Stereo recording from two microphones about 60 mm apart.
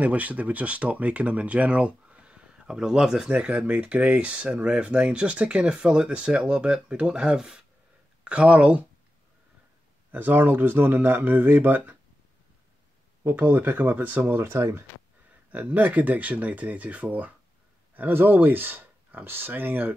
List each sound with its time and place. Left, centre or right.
0.0 s speech: right; by 3.3 s centre
3.3 s speech: right
10.1 s speech: right
13.2 s speech: right
14.4 s speech: right
15.5 s speech: right